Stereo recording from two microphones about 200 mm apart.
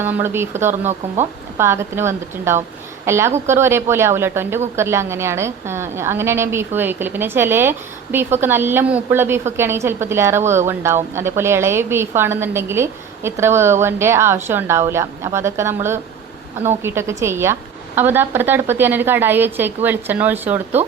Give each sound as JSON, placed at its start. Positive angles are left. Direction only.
{"t": 0.0, "sound": "a woman's voice", "side_deg": -10}
{"t": 0.9, "sound": "speech", "side_deg": -35}
{"t": 1.5, "sound": "a woman's voice", "side_deg": -15}